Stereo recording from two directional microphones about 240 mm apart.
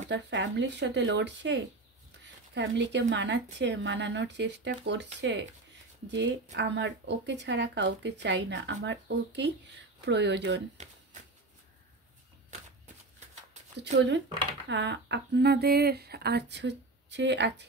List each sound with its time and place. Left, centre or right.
0.1 s speech: right
12.4 s a sound: right
13.9 s speech: right